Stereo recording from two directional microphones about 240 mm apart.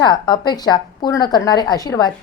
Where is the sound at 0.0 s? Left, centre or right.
Centre.